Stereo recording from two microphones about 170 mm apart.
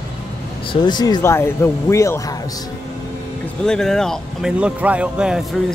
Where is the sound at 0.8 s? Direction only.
25° left (ahead or behind).